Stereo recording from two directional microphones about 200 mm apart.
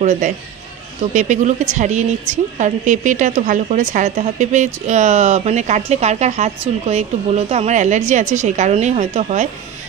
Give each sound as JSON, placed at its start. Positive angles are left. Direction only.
{"t": 0.0, "sound": "a woman's voice", "side_deg": -35}